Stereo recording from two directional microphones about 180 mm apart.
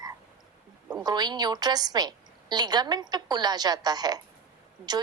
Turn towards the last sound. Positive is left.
turn(degrees=-20)  # may be behind; listen again after turning